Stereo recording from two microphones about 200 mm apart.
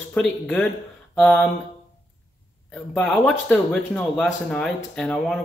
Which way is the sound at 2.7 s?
5° left (ahead or behind).